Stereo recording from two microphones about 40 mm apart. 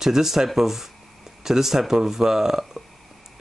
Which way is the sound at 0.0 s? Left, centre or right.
Centre.